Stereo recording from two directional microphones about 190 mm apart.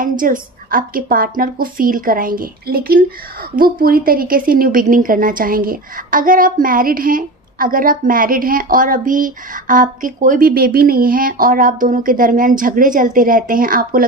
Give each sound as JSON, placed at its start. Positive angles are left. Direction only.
{"t": 0.2, "sound": "a woman's voice", "side_deg": -45}